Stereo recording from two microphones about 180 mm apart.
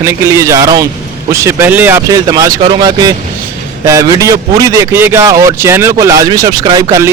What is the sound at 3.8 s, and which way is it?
A man's voice, 15° right (ahead or behind).